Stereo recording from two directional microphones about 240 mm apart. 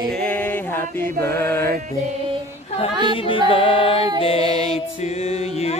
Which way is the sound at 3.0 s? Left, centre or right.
Left.